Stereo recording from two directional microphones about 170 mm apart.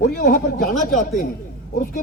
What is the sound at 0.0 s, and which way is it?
Speech, 60° left (ahead or behind).